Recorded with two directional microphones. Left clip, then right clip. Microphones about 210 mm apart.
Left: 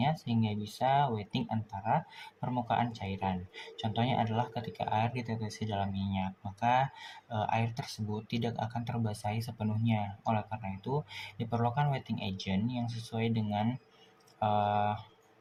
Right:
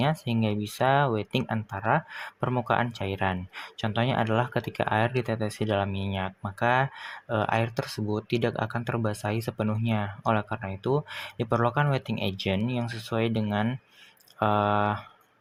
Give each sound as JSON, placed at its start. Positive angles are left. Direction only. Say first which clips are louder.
{"t": 0.0, "sound": "speech", "louder": "right 5 dB", "side_deg": -50}